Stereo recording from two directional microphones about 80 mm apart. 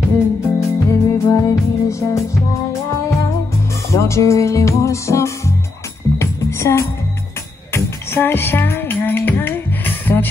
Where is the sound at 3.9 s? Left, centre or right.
Left.